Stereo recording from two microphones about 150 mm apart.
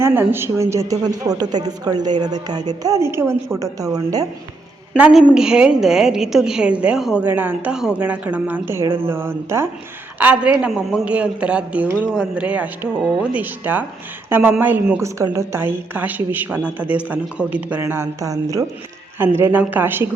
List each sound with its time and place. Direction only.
0.0 s a woman's voice: 15° right (ahead or behind)
4.9 s a woman's voice: 10° right (ahead or behind)